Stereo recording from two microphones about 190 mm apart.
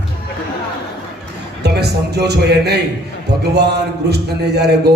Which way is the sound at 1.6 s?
60° right (ahead or behind).